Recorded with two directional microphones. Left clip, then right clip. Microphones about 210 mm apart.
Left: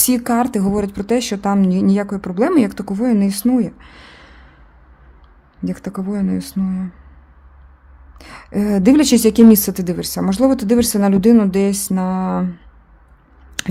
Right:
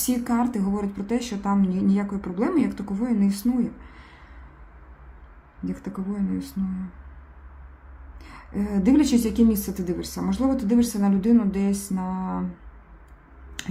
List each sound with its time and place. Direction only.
0.0 s speech: 50° left (ahead or behind)
5.6 s speech: 45° left (ahead or behind)
8.2 s speech: 50° left (ahead or behind)
13.6 s speech: 50° left (ahead or behind)